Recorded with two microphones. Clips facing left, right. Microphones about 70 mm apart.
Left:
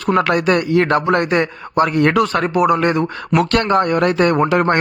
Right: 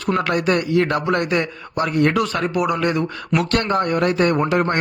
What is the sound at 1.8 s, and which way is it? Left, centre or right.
Speech, left.